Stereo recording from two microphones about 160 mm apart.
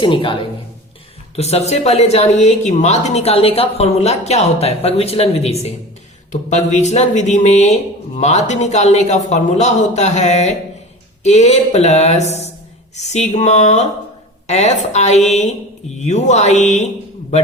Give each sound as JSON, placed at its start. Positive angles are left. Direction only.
{"t": 0.0, "sound": "a woman's voice", "side_deg": 30}
{"t": 1.4, "sound": "a woman's voice", "side_deg": 40}